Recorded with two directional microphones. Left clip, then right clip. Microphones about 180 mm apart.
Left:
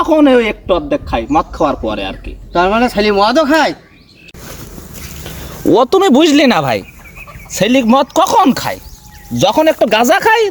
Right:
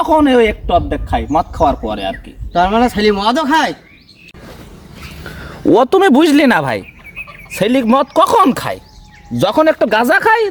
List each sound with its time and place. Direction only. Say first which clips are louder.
0.1 s a man's voice: left 1 dB; 10° right (ahead or behind)
5.2 s a man's voice: even; 10° right (ahead or behind)